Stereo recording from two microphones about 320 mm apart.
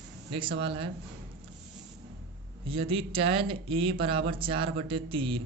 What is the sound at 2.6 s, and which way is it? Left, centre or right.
Speech, centre.